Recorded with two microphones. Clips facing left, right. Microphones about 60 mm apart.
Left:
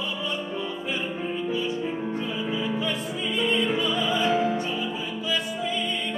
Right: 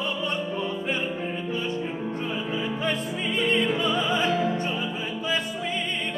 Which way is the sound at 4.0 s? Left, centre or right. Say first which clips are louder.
Even; centre.